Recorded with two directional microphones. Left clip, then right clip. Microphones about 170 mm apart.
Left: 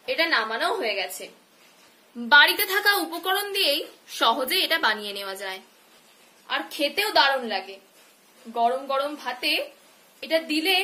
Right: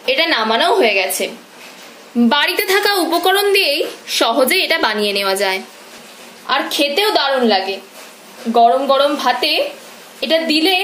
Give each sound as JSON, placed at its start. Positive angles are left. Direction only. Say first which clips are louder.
{"t": 0.0, "sound": "a woman's voice", "louder": "right 8 dB", "side_deg": -20}